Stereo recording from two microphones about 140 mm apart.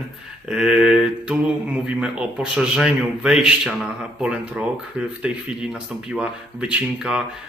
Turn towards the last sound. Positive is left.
turn(degrees=-5)  # may be behind; listen again after turning